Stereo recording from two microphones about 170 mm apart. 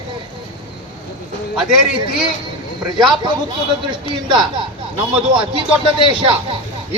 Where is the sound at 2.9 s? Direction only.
30° right (ahead or behind).